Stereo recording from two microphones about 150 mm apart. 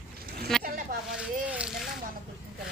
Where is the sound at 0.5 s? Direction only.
Centre (ahead or behind).